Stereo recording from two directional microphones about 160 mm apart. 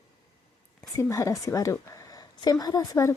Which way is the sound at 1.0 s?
20° left (ahead or behind).